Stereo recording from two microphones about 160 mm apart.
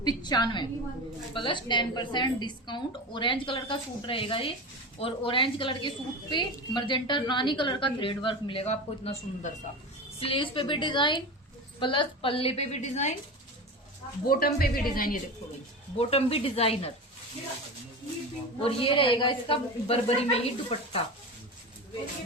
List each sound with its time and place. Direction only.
0.0 s a woman's voice: 25° left (ahead or behind); by 13.1 s 45° left (ahead or behind)
14.3 s speech: 70° left (ahead or behind)
16.0 s a woman's voice: 40° left (ahead or behind)
18.6 s a woman's voice: 35° left (ahead or behind)